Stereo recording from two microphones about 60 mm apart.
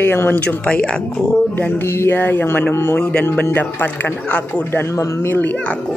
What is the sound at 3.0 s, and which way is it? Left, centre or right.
Speech, left.